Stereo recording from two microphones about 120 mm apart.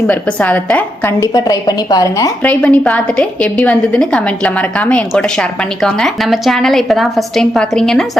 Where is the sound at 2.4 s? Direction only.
10° left (ahead or behind).